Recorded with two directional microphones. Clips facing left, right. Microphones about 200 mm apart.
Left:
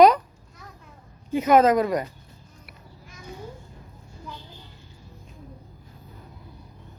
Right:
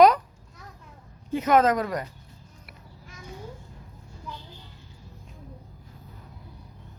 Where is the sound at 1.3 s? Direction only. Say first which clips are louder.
Left 3 dB; 10° left (ahead or behind).